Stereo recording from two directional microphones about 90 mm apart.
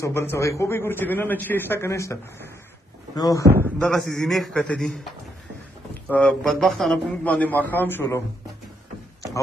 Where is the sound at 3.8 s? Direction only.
5° left (ahead or behind).